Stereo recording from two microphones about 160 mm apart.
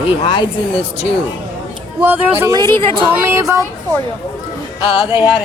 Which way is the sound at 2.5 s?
30° right (ahead or behind).